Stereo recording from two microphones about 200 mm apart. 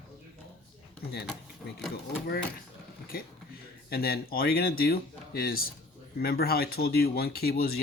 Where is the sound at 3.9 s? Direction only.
50° left (ahead or behind).